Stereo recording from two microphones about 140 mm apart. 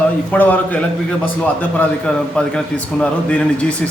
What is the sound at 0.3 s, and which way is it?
Speech, 10° left (ahead or behind).